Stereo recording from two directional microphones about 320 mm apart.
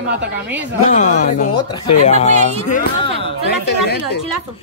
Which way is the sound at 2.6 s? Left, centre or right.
Left.